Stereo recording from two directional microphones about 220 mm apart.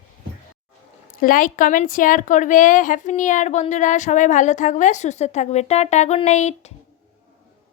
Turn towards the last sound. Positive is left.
turn(degrees=30)  # may be behind; listen again after turning